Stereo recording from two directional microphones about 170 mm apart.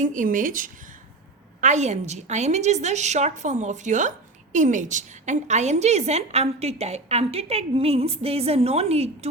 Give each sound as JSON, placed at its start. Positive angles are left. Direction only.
{"t": 0.0, "sound": "a woman's voice", "side_deg": -50}